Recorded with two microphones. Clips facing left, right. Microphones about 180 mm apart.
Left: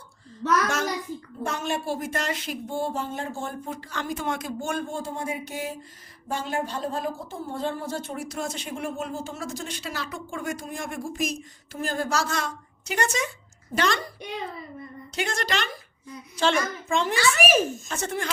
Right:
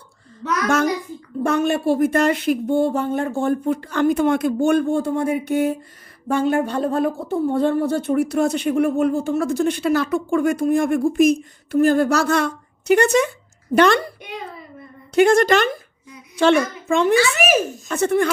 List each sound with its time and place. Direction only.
1.5 s a woman's voice: 60° right (ahead or behind)
15.1 s a woman's voice: 50° right (ahead or behind)